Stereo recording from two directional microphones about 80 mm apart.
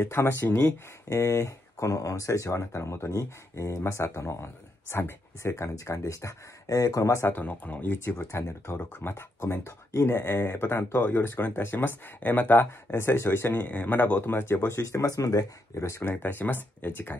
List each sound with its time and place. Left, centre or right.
0.0 s speech: left
1.0 s speech: left
7.2 s speech: left
15.7 s speech: left
16.1 s speech: left